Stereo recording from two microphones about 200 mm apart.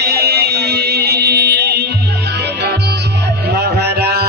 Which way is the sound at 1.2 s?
50° right (ahead or behind).